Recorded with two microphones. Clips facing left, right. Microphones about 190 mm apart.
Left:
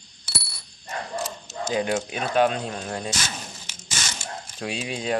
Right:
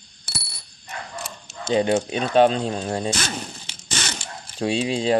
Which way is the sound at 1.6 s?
30° right (ahead or behind).